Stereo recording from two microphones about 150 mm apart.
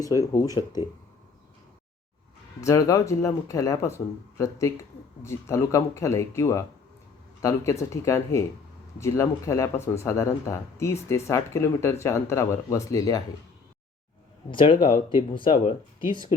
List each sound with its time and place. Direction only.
0.0 s speech: 20° left (ahead or behind)
2.6 s speech: 20° left (ahead or behind)
14.5 s speech: 35° left (ahead or behind)